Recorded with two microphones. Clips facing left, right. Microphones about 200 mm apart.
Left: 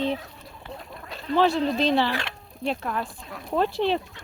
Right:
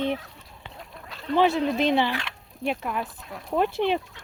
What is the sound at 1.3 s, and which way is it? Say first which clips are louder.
Speech: even; 15° right (ahead or behind).